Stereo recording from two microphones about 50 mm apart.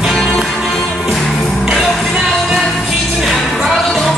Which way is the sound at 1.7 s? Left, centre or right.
Centre.